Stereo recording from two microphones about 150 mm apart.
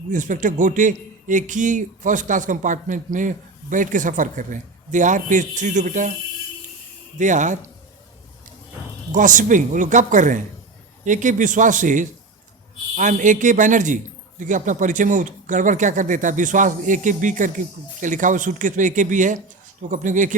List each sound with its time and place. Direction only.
0.1 s a man's voice: 60° right (ahead or behind)
7.2 s a man's voice: 55° right (ahead or behind)
9.1 s a man's voice: 60° right (ahead or behind)